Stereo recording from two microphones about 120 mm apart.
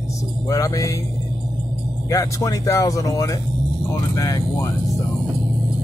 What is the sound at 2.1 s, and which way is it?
Speech, 25° left (ahead or behind).